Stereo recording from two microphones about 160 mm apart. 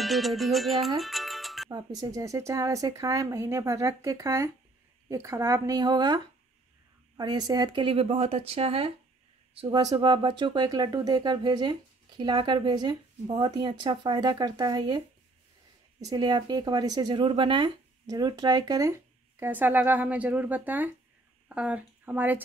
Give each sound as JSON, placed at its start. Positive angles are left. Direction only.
{"t": 0.0, "sound": "music", "side_deg": 0}
{"t": 1.7, "sound": "speech", "side_deg": -25}